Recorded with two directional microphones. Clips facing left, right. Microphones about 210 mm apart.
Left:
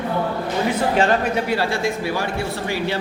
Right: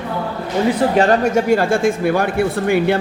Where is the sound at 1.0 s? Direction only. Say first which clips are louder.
Right 5 dB; 40° right (ahead or behind).